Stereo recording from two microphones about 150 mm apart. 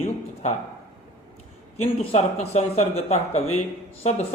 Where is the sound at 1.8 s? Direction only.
45° left (ahead or behind).